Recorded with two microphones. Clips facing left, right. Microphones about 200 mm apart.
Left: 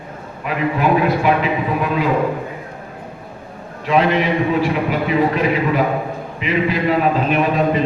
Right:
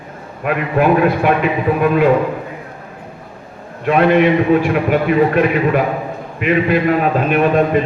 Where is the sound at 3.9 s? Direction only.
55° right (ahead or behind).